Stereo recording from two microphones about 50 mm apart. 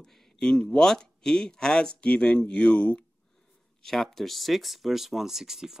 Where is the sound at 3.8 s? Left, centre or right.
Centre.